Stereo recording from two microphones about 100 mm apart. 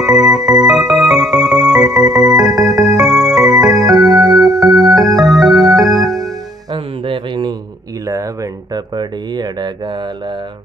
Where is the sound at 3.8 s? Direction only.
40° right (ahead or behind).